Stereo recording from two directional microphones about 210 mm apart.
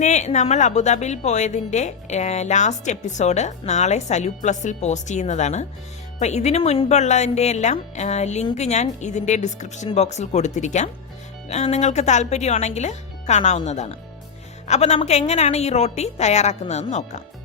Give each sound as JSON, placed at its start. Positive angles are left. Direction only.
{"t": 0.0, "sound": "a woman's voice", "side_deg": 35}